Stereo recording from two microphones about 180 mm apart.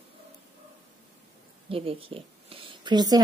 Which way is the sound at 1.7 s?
30° right (ahead or behind).